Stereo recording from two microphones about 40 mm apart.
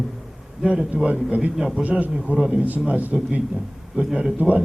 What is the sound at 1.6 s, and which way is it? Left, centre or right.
Speech, centre.